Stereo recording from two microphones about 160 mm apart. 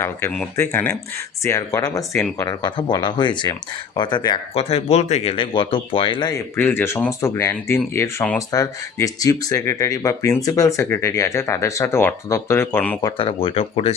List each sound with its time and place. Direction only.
0.0 s speech: 10° left (ahead or behind); by 6.4 s 30° left (ahead or behind)
6.6 s speech: 15° left (ahead or behind)
13.1 s speech: 35° left (ahead or behind)